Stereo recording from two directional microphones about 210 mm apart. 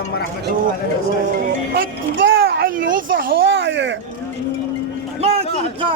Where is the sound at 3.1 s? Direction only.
60° right (ahead or behind).